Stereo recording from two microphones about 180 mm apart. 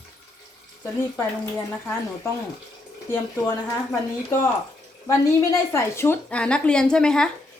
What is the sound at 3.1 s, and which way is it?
Speech, 15° left (ahead or behind).